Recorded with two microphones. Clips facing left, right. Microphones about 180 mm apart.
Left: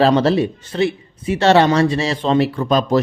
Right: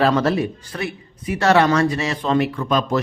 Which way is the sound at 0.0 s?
30° left (ahead or behind).